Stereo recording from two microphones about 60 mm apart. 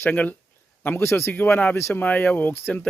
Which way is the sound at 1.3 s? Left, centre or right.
Left.